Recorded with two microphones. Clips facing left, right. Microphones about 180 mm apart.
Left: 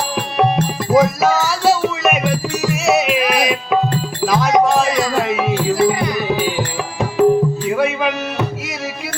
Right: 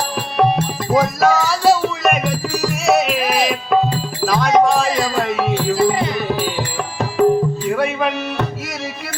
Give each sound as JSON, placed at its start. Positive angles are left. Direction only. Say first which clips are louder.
{"t": 0.3, "sound": "music", "louder": "even", "side_deg": 0}
{"t": 5.9, "sound": "music", "louder": "even", "side_deg": -25}
{"t": 6.1, "sound": "music", "louder": "left 2 dB", "side_deg": 0}